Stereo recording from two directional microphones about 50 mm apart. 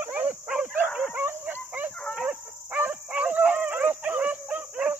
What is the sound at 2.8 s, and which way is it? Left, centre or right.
Dog, right.